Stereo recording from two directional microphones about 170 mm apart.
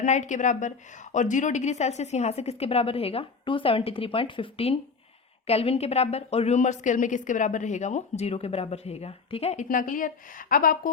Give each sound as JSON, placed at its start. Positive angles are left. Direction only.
{"t": 0.0, "sound": "a woman's voice", "side_deg": 45}
{"t": 9.6, "sound": "a woman's voice", "side_deg": 55}